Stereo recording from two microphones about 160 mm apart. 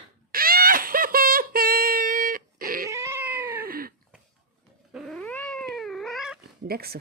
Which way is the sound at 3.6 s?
65° right (ahead or behind).